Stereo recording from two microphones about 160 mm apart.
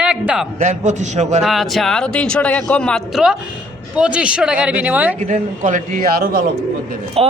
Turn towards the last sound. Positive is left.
turn(degrees=-35)  # may be behind; listen again after turning